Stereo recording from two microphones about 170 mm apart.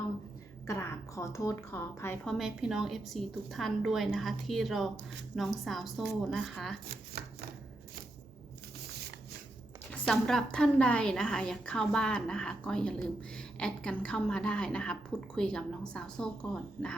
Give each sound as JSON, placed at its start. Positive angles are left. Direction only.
{"t": 0.7, "sound": "a woman's voice", "side_deg": 15}
{"t": 2.2, "sound": "a woman's voice", "side_deg": 0}
{"t": 9.9, "sound": "a woman's voice", "side_deg": 5}